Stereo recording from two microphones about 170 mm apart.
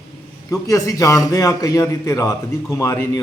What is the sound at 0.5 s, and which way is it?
A man's voice, 20° left (ahead or behind).